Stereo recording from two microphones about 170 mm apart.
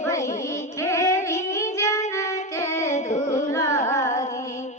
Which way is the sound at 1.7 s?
15° left (ahead or behind).